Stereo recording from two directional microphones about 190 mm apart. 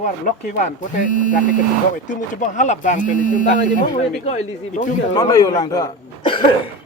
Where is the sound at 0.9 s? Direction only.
45° left (ahead or behind).